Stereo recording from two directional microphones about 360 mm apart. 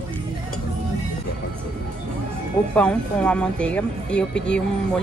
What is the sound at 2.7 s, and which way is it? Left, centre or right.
Speech, centre.